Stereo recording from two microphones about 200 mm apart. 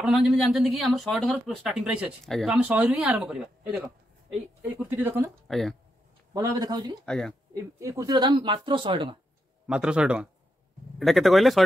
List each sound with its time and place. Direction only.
0.0 s speech: centre (ahead or behind)
4.8 s speech: 10° right (ahead or behind)
5.5 s speech: centre (ahead or behind)
6.3 s speech: 20° right (ahead or behind)
7.1 s speech: 5° left (ahead or behind)
7.5 s speech: 15° right (ahead or behind)
9.7 s speech: 5° right (ahead or behind)